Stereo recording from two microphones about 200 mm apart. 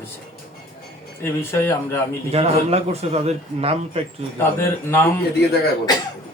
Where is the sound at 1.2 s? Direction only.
10° left (ahead or behind).